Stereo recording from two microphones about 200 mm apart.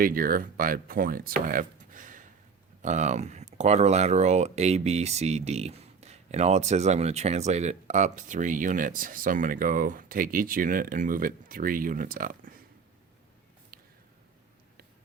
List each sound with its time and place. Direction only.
0.0 s speech: 45° right (ahead or behind)